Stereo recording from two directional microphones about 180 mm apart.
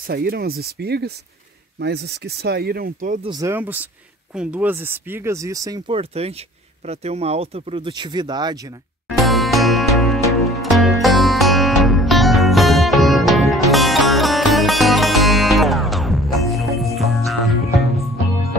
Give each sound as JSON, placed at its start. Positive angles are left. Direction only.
{"t": 0.0, "sound": "speech", "side_deg": -60}
{"t": 3.3, "sound": "speech", "side_deg": -20}
{"t": 5.9, "sound": "speech", "side_deg": -35}
{"t": 9.2, "sound": "music", "side_deg": 0}